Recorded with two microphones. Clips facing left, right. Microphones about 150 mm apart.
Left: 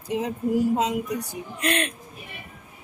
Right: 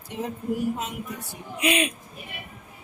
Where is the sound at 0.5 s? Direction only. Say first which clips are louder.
Left 7 dB; 90° left.